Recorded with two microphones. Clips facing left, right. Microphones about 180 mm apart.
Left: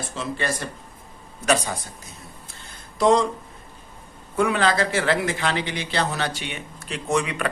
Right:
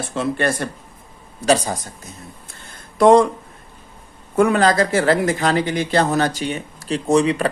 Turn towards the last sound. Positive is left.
turn(degrees=-35)  # may be behind; listen again after turning